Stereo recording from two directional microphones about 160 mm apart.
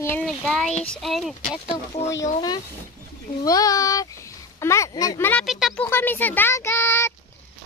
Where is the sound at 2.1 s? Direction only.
25° left (ahead or behind).